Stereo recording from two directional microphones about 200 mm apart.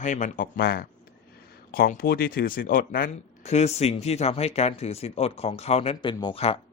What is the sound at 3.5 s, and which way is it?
Speech, 30° left (ahead or behind).